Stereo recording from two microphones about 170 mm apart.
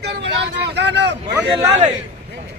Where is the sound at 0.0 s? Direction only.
85° right.